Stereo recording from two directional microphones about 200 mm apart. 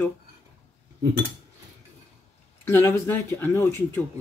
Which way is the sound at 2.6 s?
10° left (ahead or behind).